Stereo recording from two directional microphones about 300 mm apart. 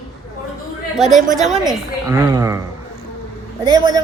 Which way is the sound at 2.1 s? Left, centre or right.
Centre.